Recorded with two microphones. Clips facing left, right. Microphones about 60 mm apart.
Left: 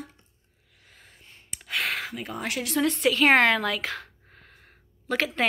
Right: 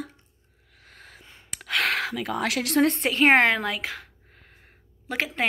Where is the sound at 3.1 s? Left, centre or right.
Right.